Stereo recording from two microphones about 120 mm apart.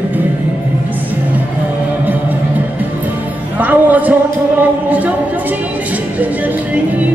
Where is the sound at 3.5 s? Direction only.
15° right (ahead or behind).